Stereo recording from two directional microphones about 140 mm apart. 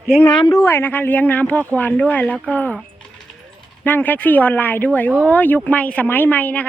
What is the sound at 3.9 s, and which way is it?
A woman's voice, 15° left (ahead or behind).